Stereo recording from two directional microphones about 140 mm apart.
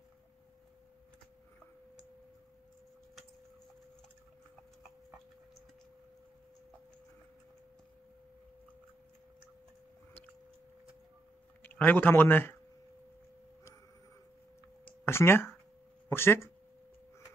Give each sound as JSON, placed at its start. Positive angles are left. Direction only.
{"t": 11.6, "sound": "speech", "side_deg": 15}
{"t": 14.9, "sound": "a sound", "side_deg": 15}
{"t": 16.1, "sound": "speech", "side_deg": 15}